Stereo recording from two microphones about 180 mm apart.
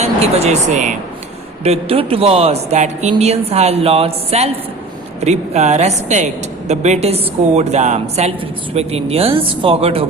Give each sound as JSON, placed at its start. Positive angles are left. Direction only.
{"t": 0.0, "sound": "a woman's voice", "side_deg": -35}